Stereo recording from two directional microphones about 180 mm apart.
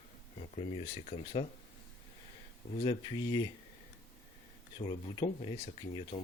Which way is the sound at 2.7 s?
25° left (ahead or behind).